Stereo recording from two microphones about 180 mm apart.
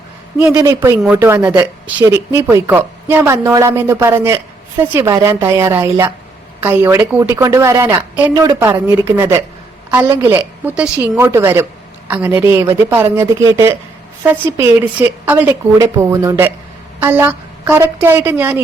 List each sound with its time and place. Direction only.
0.5 s a woman's voice: 20° right (ahead or behind)